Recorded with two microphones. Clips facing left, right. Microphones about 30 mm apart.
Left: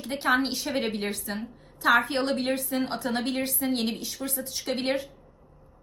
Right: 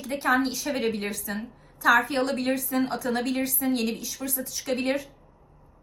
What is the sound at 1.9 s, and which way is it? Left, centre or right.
A woman's voice, left.